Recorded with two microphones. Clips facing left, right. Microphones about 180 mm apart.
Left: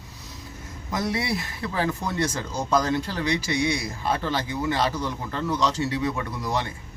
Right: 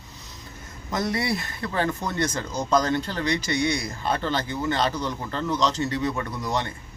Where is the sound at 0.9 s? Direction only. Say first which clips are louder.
Right 1 dB; 5° left (ahead or behind).